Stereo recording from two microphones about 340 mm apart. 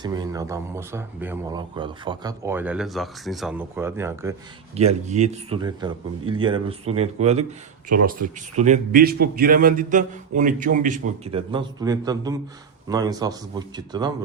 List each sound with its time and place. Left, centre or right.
0.0 s speech: centre
4.7 s a man's voice: centre